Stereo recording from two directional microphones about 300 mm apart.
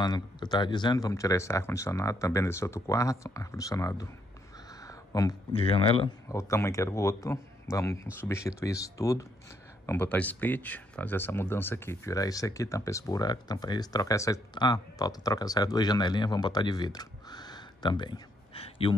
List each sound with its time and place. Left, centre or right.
0.0 s speech: centre